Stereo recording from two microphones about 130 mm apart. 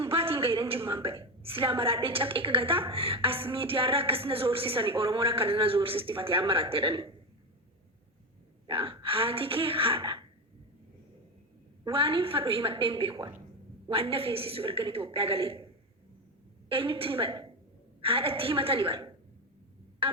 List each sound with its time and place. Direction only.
0.0 s a woman's voice: 45° right (ahead or behind)
8.6 s a woman's voice: 45° right (ahead or behind)
11.9 s a woman's voice: 45° right (ahead or behind)
20.0 s music: 45° right (ahead or behind)